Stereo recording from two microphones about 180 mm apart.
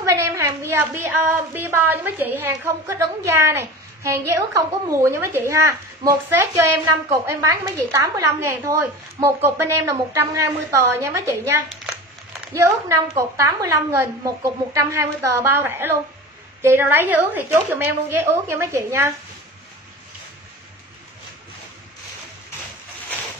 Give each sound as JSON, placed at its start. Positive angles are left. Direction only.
{"t": 0.0, "sound": "a woman's voice", "side_deg": -15}